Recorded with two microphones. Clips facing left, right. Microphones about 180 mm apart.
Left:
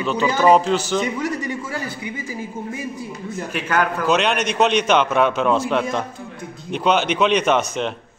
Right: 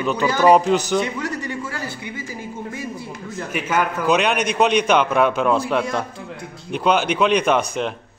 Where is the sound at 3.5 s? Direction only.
10° right (ahead or behind).